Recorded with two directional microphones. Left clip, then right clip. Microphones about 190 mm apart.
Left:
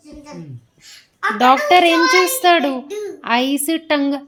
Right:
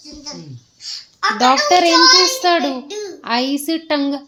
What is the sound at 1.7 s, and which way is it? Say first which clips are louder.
Speech: right 1 dB; 10° left (ahead or behind).